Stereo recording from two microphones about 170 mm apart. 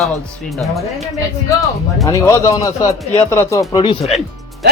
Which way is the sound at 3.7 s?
30° left (ahead or behind).